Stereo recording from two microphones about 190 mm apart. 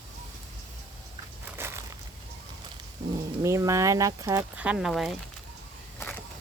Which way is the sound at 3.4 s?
15° right (ahead or behind).